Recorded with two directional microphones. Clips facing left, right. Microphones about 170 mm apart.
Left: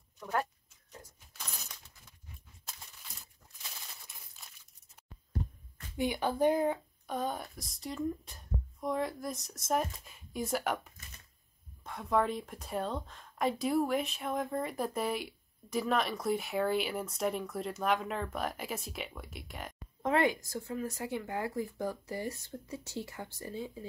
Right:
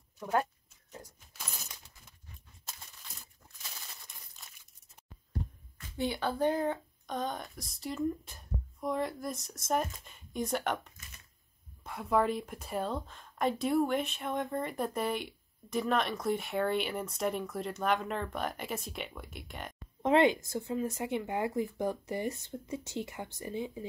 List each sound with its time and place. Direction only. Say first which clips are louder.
5.9 s speech: left 1 dB; 15° left (ahead or behind)
20.0 s speech: right 4 dB; 20° right (ahead or behind)